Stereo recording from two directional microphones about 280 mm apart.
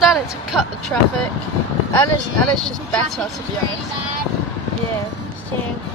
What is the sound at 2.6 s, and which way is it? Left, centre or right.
Speech, centre.